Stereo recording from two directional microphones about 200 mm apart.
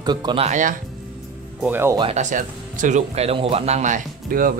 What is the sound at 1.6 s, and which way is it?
Speech, 10° right (ahead or behind).